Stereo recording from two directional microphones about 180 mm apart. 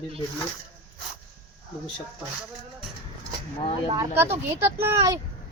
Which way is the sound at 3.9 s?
15° right (ahead or behind).